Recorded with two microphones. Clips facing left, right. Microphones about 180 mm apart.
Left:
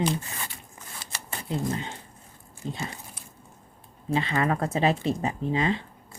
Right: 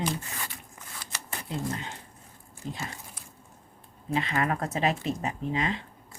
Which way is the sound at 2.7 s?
20° left (ahead or behind).